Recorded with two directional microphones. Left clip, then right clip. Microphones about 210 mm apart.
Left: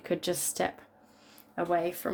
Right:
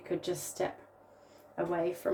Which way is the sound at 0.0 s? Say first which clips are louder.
Left 4 dB; 50° left (ahead or behind).